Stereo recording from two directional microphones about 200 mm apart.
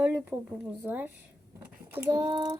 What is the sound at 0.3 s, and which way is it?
A child's voice, 15° right (ahead or behind).